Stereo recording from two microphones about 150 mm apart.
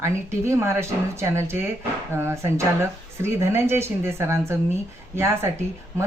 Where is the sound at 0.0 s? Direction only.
20° right (ahead or behind).